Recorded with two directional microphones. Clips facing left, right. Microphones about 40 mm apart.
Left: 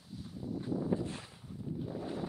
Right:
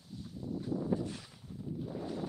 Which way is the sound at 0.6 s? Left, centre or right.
Left.